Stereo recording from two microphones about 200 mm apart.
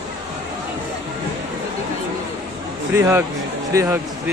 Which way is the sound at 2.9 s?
10° right (ahead or behind).